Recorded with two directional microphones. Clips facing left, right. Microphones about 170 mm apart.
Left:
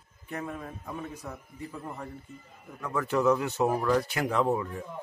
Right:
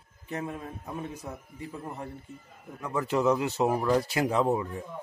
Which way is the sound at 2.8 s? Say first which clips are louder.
Even; 20° right (ahead or behind).